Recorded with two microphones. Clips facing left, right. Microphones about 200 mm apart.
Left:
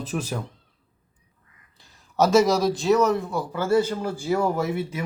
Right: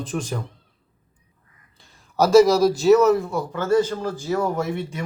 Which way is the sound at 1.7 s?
Centre (ahead or behind).